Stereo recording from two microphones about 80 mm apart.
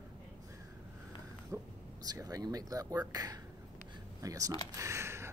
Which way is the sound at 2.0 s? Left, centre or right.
Right.